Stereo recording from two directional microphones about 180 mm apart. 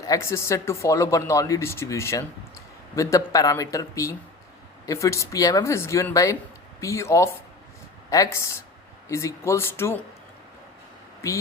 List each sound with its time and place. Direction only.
0.0 s speech: 15° left (ahead or behind)